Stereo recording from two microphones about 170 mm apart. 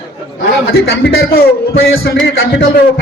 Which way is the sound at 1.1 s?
65° left (ahead or behind).